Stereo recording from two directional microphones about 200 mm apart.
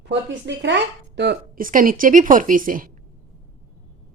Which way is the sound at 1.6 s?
45° right (ahead or behind).